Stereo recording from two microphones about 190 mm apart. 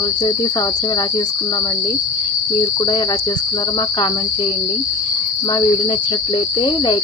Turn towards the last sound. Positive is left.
turn(degrees=25)  # may be behind; listen again after turning